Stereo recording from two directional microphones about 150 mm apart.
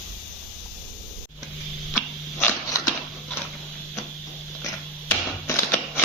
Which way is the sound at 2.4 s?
15° left (ahead or behind).